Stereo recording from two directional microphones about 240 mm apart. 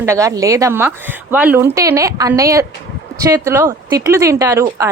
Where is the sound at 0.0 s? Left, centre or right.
Centre.